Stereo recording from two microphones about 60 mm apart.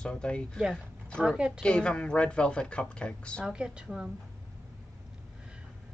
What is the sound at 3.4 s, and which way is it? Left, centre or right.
Speech, centre.